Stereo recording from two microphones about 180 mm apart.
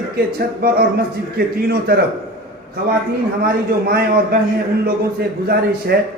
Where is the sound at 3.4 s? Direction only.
60° right (ahead or behind).